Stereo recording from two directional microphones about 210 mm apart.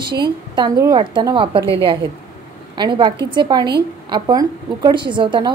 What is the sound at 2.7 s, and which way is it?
A woman's voice, 20° right (ahead or behind).